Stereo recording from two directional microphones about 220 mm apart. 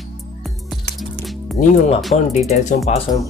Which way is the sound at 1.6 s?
40° left (ahead or behind).